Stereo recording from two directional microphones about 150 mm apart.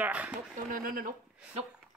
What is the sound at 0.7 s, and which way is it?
Speech, 70° right (ahead or behind).